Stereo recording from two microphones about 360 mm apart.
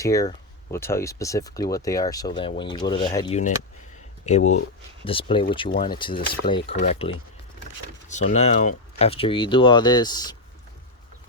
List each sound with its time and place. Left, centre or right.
0.0 s speech: centre